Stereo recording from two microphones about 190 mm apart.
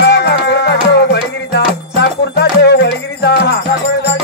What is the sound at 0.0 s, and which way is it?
Music, 60° left (ahead or behind).